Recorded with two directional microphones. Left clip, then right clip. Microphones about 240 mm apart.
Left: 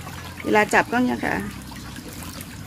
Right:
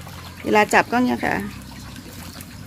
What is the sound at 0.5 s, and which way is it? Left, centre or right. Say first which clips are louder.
Speech: right 2 dB; right.